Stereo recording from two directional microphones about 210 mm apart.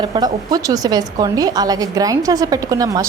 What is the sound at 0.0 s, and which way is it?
A woman's voice, 20° right (ahead or behind).